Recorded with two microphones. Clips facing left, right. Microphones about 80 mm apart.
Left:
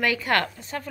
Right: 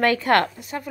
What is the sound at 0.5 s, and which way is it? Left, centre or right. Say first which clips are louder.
Speech: right 2 dB; centre.